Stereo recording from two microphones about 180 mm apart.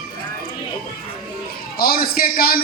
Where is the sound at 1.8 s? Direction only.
55° left (ahead or behind).